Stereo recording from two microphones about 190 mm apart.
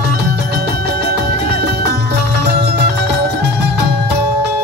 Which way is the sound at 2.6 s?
60° right (ahead or behind).